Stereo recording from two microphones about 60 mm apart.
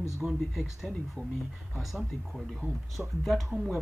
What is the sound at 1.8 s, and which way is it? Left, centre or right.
Speech, centre.